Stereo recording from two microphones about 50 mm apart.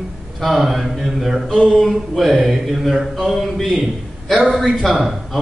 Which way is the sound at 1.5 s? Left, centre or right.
Centre.